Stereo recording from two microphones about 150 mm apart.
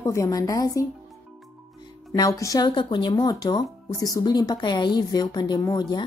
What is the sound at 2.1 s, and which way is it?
Speech, 25° left (ahead or behind).